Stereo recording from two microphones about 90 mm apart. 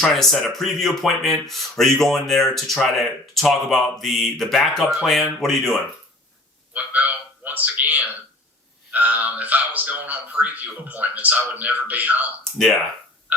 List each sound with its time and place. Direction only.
0.0 s speech: 5° left (ahead or behind)
6.7 s a sound: 15° right (ahead or behind)
8.9 s a man's voice: 20° right (ahead or behind)